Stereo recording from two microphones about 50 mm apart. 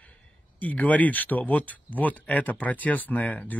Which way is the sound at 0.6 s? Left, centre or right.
Left.